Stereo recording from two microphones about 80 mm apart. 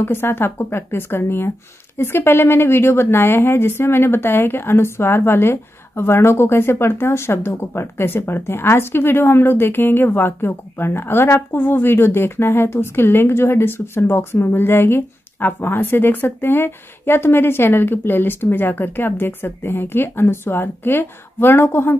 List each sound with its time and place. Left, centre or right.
0.0 s a woman's voice: left